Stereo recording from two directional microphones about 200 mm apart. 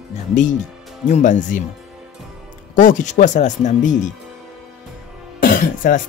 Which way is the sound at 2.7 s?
40° left (ahead or behind).